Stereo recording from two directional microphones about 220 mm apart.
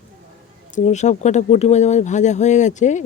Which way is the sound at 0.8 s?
30° left (ahead or behind).